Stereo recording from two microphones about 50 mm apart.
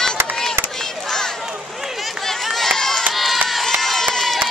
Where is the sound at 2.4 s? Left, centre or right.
Centre.